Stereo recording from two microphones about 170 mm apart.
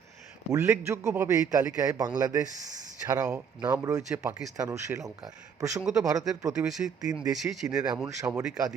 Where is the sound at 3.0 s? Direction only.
15° right (ahead or behind).